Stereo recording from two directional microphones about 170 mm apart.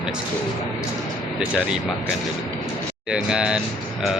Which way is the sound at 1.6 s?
5° right (ahead or behind).